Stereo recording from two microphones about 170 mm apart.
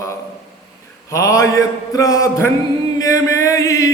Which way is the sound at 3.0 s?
20° left (ahead or behind).